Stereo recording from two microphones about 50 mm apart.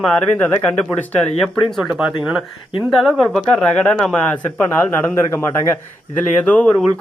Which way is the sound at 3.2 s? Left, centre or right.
Centre.